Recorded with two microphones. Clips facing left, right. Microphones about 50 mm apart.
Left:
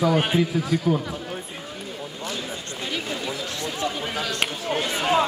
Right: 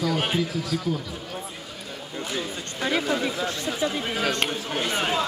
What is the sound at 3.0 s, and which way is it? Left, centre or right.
Chatter, right.